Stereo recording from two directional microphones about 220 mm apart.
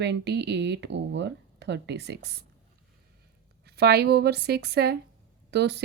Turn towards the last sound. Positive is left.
turn(degrees=-50)  # may be behind; listen again after turning